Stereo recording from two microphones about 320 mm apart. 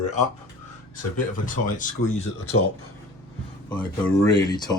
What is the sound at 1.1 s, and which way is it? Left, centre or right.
Speech, left.